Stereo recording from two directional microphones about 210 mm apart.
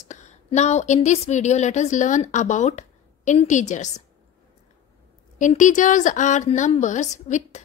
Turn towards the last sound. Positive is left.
turn(degrees=35)  # may be behind; listen again after turning